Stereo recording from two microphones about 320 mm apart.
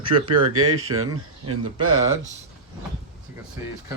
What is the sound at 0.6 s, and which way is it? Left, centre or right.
Speech, right.